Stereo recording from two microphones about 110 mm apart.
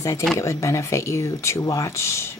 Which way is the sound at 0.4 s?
30° left (ahead or behind).